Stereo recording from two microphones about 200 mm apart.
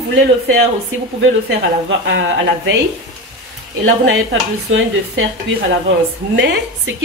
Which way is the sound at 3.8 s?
70° right (ahead or behind).